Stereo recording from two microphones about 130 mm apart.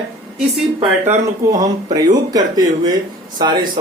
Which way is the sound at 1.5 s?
30° right (ahead or behind).